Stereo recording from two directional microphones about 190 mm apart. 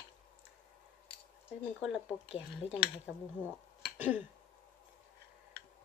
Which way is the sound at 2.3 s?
30° left (ahead or behind).